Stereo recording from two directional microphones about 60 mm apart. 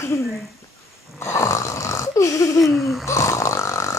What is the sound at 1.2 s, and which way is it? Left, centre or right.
Snoring, left.